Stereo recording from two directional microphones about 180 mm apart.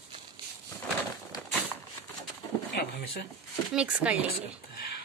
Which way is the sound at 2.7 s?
65° left (ahead or behind).